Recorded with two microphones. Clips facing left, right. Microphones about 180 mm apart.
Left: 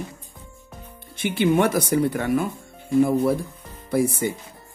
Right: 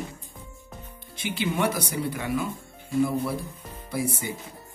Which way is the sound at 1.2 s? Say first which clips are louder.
Left 7 dB; 55° left (ahead or behind).